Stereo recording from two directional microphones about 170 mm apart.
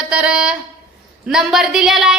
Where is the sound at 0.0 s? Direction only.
5° right (ahead or behind).